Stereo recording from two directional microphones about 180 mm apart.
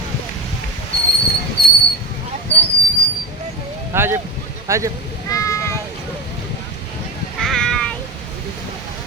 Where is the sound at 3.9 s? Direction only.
15° right (ahead or behind).